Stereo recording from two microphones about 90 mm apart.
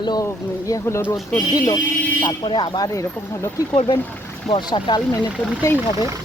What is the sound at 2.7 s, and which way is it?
Speech, 40° left (ahead or behind).